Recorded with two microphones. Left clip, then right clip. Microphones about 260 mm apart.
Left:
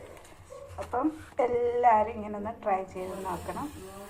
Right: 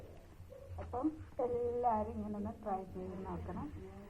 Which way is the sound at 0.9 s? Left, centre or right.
Left.